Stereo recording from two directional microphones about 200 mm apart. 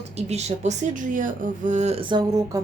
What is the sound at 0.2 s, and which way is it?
A woman's voice, 35° right (ahead or behind).